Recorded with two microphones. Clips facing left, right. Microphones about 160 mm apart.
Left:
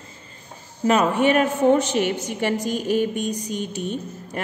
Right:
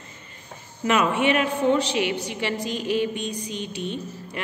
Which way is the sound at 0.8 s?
40° left (ahead or behind).